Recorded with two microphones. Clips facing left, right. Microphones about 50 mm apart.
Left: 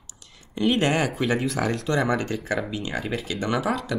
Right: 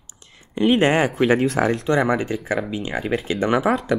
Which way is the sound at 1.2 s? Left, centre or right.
Right.